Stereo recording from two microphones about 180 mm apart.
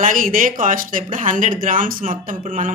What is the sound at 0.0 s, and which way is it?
Speech, 50° right (ahead or behind).